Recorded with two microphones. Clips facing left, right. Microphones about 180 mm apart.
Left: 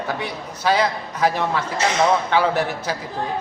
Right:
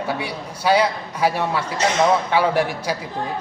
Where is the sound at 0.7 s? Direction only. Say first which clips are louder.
Right 2 dB; 10° right (ahead or behind).